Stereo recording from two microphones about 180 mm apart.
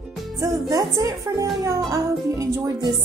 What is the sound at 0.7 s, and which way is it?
Speech, 20° right (ahead or behind).